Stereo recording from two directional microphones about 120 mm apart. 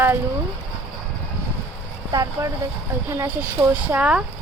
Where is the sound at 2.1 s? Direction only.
30° right (ahead or behind).